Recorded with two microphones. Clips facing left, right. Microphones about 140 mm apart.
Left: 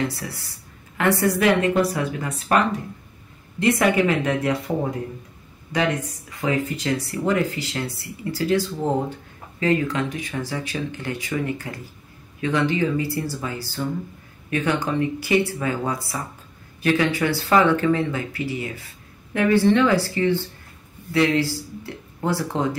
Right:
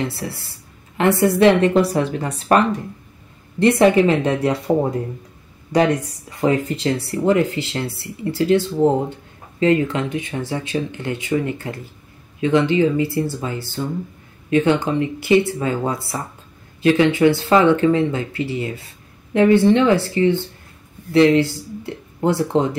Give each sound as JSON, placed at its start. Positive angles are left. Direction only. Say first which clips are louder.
{"t": 0.1, "sound": "a woman's voice", "louder": "right 4 dB", "side_deg": -25}